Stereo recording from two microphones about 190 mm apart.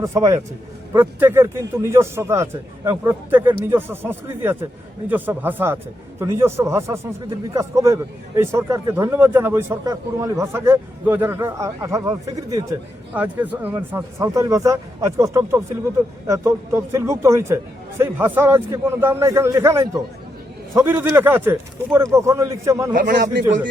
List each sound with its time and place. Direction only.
0.0 s a man's voice: 20° right (ahead or behind)
23.0 s speech: 45° right (ahead or behind)